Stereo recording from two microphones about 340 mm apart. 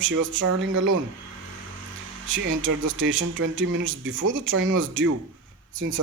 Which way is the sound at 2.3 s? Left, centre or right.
Right.